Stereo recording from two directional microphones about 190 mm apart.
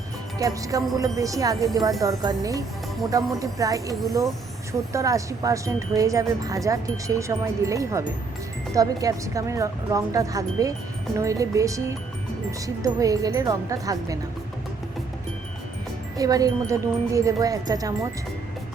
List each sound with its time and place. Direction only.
0.3 s speech: 20° right (ahead or behind)
16.1 s speech: 20° right (ahead or behind)